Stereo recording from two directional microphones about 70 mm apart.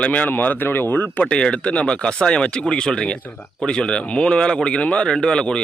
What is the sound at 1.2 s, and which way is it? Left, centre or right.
Speech, centre.